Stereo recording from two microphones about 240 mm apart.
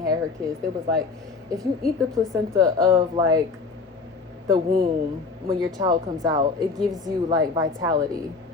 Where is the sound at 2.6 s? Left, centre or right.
Centre.